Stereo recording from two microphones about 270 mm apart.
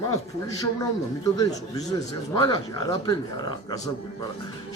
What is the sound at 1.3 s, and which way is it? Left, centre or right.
Speech, centre.